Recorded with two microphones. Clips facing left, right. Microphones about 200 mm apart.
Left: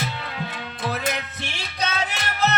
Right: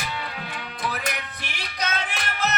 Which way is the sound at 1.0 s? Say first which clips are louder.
Left 4 dB; 25° left (ahead or behind).